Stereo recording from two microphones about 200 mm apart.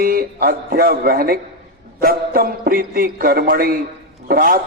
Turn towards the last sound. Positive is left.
turn(degrees=-45)  # may be behind; listen again after turning